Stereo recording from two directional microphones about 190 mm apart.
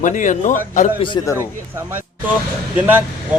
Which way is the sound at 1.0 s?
15° left (ahead or behind).